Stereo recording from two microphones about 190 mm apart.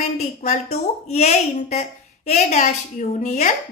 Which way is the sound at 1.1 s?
35° left (ahead or behind).